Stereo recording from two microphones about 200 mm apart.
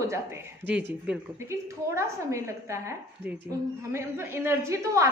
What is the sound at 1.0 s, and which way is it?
A woman's voice, 15° right (ahead or behind).